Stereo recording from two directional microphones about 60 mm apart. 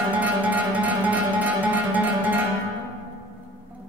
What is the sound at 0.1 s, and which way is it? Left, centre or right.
Music, right.